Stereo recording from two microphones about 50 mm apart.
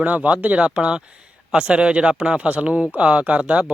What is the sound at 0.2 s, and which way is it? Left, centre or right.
Speech, right.